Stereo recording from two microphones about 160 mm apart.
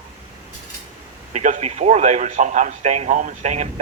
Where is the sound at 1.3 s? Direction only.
45° right (ahead or behind).